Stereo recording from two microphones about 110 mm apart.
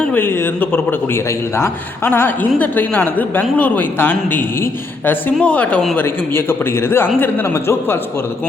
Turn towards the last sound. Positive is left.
turn(degrees=20)  # may be behind; listen again after turning